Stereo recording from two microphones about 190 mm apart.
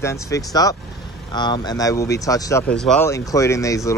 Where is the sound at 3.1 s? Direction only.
15° left (ahead or behind).